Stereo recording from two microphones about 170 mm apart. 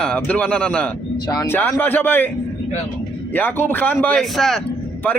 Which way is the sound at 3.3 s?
10° left (ahead or behind).